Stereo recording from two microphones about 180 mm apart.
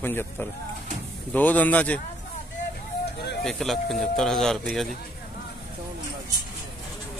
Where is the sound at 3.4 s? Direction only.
Centre (ahead or behind).